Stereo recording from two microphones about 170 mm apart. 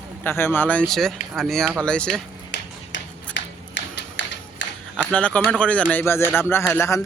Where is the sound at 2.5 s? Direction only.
80° left.